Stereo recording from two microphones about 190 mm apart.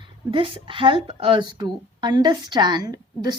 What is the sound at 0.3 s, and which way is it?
A woman's voice, 30° right (ahead or behind).